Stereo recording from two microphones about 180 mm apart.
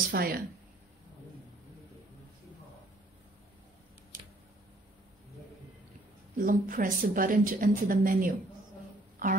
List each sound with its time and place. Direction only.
0.1 s speech: 55° right (ahead or behind)
6.3 s a woman's voice: 50° right (ahead or behind)